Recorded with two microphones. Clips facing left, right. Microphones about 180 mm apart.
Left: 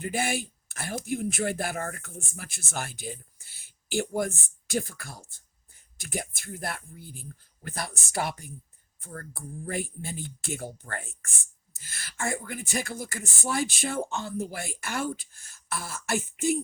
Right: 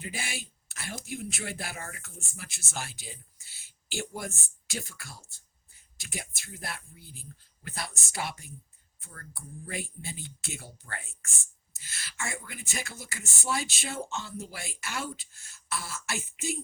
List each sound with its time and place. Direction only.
0.0 s speech: 55° left (ahead or behind)